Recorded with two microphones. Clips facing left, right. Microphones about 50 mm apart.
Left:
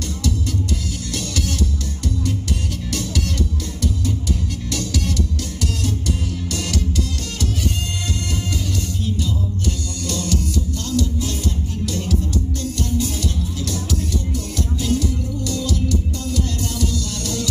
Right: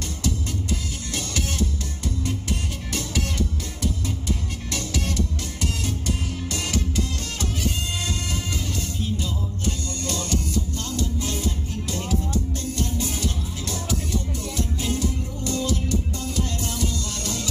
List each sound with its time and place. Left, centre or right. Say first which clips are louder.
1.1 s music: left 3 dB; right
4.7 s music: left 3 dB; right
10.0 s music: left 4 dB; right
12.7 s music: left 4 dB; right
14.3 s music: left 3 dB; right